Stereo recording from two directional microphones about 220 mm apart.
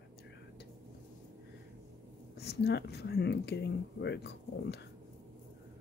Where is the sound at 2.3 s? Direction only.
45° left (ahead or behind).